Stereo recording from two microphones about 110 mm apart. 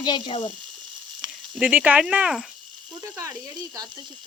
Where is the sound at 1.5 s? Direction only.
10° right (ahead or behind).